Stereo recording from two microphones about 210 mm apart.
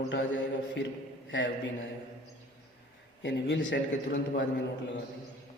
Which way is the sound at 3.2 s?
60° left (ahead or behind).